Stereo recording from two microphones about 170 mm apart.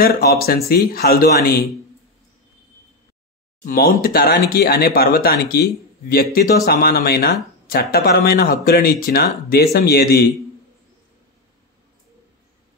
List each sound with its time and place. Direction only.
0.0 s speech: 65° left (ahead or behind)
3.6 s speech: 60° left (ahead or behind)